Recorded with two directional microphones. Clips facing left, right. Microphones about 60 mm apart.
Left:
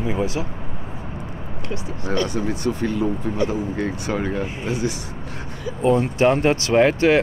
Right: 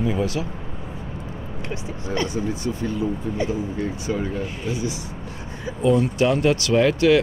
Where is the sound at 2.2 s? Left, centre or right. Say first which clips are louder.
Left 2 dB; left.